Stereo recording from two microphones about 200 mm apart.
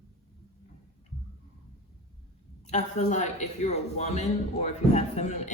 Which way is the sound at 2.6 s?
35° left (ahead or behind).